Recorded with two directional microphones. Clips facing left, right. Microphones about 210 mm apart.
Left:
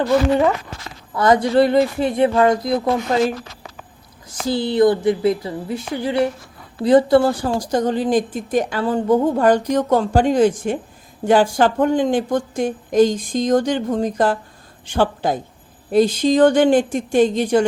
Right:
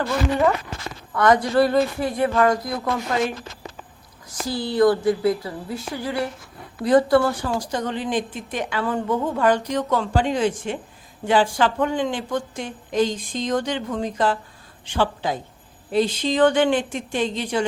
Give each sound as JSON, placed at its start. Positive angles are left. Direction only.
{"t": 1.1, "sound": "speech", "side_deg": 25}
{"t": 7.4, "sound": "a woman's voice", "side_deg": 40}